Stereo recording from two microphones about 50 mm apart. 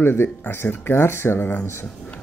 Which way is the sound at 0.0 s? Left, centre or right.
Left.